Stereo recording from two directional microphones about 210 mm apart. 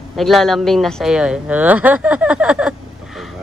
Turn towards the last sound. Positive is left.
turn(degrees=-5)  # may be behind; listen again after turning